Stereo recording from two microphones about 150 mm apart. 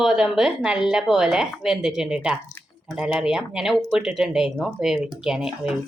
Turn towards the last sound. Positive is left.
turn(degrees=-5)  # may be behind; listen again after turning